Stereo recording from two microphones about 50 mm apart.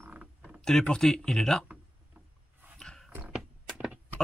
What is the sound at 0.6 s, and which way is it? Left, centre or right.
Speech, centre.